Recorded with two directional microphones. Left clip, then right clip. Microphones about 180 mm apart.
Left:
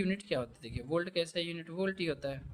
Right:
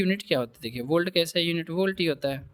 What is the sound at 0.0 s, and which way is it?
A man's voice, 50° right (ahead or behind).